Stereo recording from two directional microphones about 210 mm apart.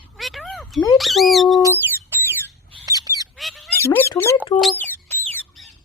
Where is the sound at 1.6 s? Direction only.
10° left (ahead or behind).